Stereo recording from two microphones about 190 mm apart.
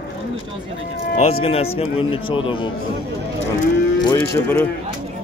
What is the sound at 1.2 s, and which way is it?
A man's voice, 30° left (ahead or behind).